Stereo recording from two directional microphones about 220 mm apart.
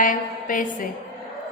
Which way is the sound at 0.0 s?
35° left (ahead or behind).